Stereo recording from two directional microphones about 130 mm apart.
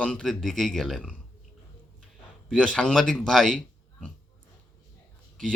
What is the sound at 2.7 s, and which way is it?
Speech, 5° left (ahead or behind).